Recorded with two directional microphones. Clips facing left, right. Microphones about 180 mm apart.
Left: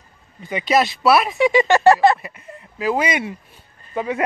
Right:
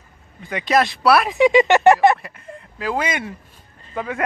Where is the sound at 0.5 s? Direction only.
5° left (ahead or behind).